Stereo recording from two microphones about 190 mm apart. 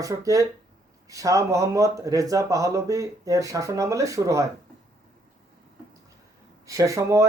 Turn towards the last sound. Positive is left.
turn(degrees=-15)  # may be behind; listen again after turning